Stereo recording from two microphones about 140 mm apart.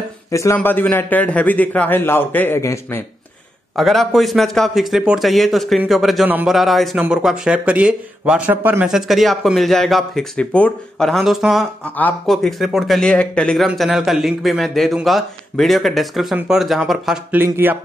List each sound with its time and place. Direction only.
0.3 s a man's voice: 20° left (ahead or behind)
3.7 s speech: centre (ahead or behind)
6.2 s speech: 10° right (ahead or behind)
6.5 s speech: centre (ahead or behind)
8.8 s speech: centre (ahead or behind)
17.4 s speech: 15° right (ahead or behind)